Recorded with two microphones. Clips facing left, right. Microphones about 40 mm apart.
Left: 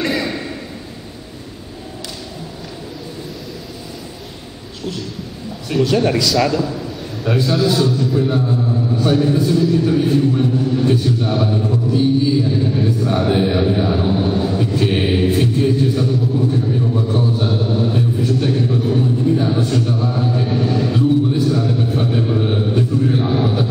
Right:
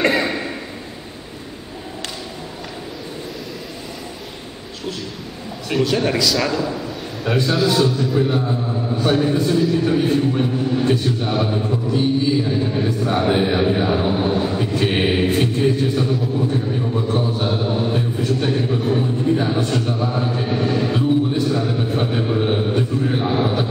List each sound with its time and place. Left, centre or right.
0.1 s a sound: centre
5.8 s a man's voice: centre
8.2 s a man's voice: centre